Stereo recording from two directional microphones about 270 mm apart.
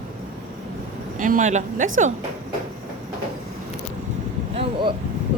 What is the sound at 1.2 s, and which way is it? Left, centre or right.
Speech, right.